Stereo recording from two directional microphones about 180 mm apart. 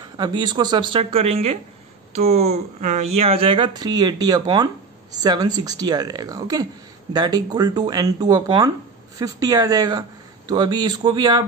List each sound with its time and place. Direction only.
0.2 s speech: 25° right (ahead or behind)